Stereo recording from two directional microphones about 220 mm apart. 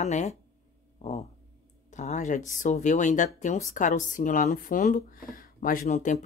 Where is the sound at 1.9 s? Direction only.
35° left (ahead or behind).